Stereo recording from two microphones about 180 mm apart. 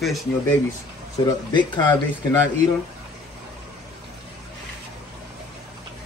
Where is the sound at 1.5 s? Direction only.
25° left (ahead or behind).